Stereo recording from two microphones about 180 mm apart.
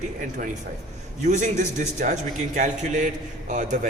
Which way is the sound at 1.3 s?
40° right (ahead or behind).